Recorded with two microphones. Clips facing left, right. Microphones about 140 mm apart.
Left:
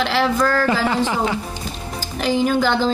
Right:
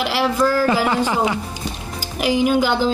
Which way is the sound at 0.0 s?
10° right (ahead or behind).